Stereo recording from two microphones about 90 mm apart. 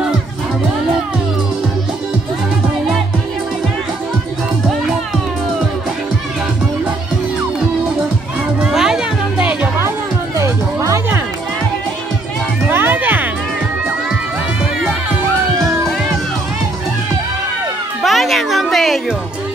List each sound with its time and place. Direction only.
8.5 s music: 5° right (ahead or behind)
9.4 s music: 20° right (ahead or behind)
9.8 s music: 30° right (ahead or behind)
12.6 s music: 20° right (ahead or behind)
18.0 s music: centre (ahead or behind)